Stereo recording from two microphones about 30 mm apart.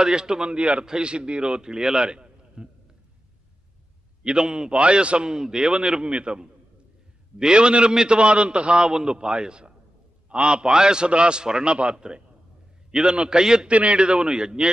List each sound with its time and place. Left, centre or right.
0.0 s a man's voice: right
0.6 s a man's voice: right
4.2 s a man's voice: right
4.7 s a man's voice: right
5.3 s a man's voice: right
8.2 s a man's voice: right
8.9 s a man's voice: right
10.7 s a man's voice: right
13.7 s a man's voice: right
13.9 s a man's voice: right